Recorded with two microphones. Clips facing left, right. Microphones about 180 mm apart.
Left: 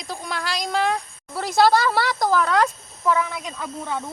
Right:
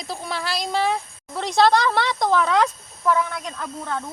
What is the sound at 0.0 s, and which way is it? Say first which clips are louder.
Speech: right 1 dB; centre (ahead or behind).